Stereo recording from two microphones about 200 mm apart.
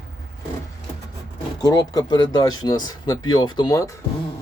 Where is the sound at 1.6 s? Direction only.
20° left (ahead or behind).